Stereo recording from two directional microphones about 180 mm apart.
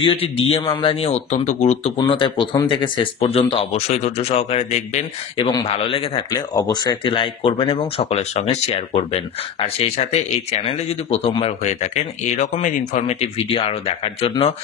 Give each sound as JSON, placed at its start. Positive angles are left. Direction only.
{"t": 0.0, "sound": "speech", "side_deg": 30}
{"t": 2.0, "sound": "speech", "side_deg": 25}